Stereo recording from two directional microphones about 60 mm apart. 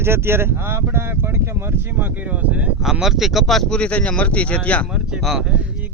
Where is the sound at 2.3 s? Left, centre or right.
Right.